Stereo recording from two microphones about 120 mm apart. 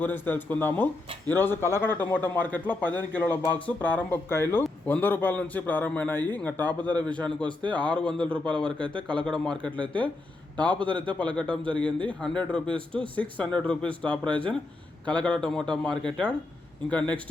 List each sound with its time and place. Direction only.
0.0 s a man's voice: 15° left (ahead or behind)